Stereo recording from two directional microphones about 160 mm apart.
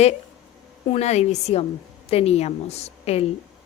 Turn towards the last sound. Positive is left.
turn(degrees=40)  # may be behind; listen again after turning